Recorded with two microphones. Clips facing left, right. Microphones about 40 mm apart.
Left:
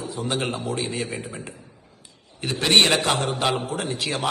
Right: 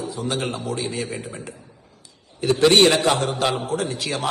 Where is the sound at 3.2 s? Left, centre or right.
Left.